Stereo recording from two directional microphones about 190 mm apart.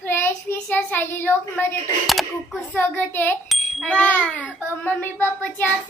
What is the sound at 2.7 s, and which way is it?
A child's voice, 10° left (ahead or behind).